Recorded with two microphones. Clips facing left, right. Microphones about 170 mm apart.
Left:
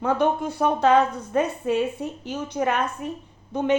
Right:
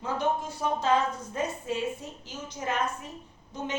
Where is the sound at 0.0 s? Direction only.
60° left (ahead or behind).